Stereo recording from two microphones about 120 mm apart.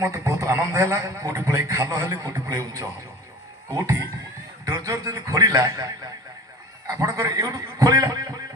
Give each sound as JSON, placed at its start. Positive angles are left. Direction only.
{"t": 0.0, "sound": "a man's voice", "side_deg": -25}